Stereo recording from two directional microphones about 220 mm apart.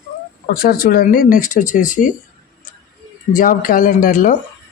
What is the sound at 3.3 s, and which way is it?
Speech, 40° left (ahead or behind).